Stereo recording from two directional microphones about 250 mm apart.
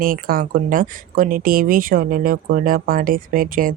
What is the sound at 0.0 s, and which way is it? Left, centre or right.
Speech, right.